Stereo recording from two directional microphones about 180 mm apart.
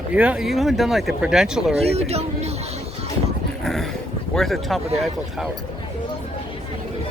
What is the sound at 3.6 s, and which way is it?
Dog, centre (ahead or behind).